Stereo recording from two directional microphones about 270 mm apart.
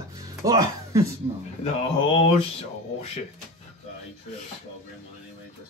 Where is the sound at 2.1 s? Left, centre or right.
Left.